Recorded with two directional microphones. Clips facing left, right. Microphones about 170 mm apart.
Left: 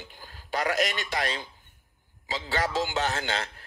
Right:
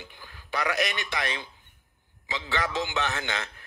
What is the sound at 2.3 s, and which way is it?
Speech, 40° left (ahead or behind).